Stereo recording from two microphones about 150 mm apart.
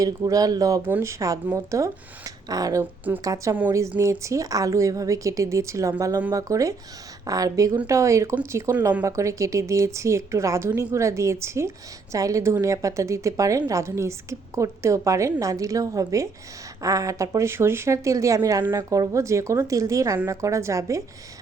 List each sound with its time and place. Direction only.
0.0 s a woman's voice: 25° right (ahead or behind)